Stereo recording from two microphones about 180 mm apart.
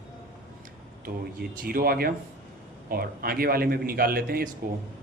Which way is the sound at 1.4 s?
55° right (ahead or behind).